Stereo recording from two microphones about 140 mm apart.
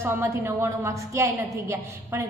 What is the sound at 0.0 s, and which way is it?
A woman's voice, 20° right (ahead or behind).